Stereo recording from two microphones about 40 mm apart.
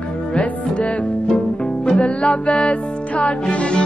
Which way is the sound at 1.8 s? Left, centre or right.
Left.